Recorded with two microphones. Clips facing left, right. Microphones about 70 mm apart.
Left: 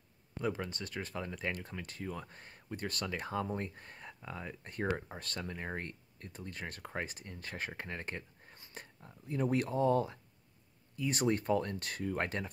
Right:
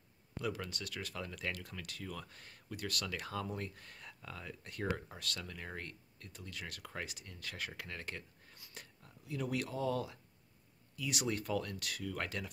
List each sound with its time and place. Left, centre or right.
0.4 s speech: left